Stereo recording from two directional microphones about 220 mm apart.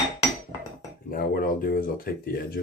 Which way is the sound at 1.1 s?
45° left (ahead or behind).